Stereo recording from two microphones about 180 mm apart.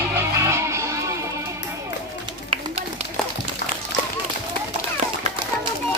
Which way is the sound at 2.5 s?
30° right (ahead or behind).